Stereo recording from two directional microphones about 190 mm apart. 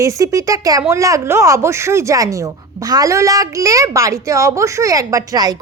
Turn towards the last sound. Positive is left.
turn(degrees=-20)  # may be behind; listen again after turning